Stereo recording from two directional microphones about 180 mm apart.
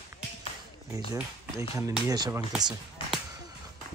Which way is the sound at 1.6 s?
20° right (ahead or behind).